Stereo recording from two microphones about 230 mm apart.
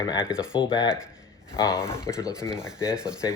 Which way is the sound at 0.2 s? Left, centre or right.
Centre.